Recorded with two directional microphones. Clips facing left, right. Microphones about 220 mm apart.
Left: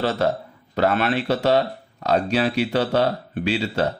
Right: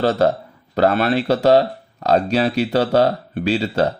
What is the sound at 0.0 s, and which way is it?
Speech, 35° right (ahead or behind).